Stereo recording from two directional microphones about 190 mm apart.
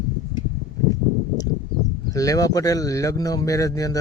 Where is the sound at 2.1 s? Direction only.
20° left (ahead or behind).